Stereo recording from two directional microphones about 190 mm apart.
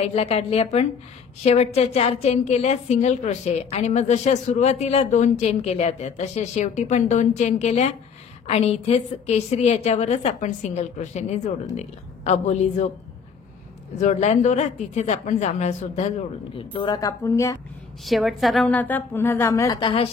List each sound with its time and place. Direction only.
0.0 s a woman's voice: 35° left (ahead or behind)
13.9 s a woman's voice: 40° left (ahead or behind)
16.5 s speech: 25° left (ahead or behind)
18.0 s a woman's voice: centre (ahead or behind); by 20.1 s 25° left (ahead or behind)